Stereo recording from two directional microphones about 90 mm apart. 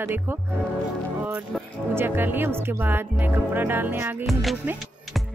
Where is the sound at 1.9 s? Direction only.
25° right (ahead or behind).